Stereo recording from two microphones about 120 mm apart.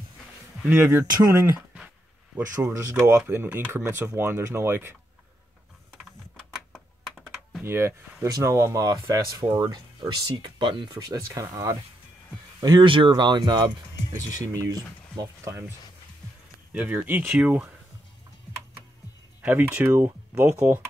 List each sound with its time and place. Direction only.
0.7 s speech: 20° right (ahead or behind)
6.7 s computer keyboard: centre (ahead or behind)
7.6 s speech: 20° right (ahead or behind); by 13.7 s 35° right (ahead or behind)
14.1 s speech: 25° right (ahead or behind)
16.7 s speech: 10° right (ahead or behind)
19.4 s speech: 15° right (ahead or behind)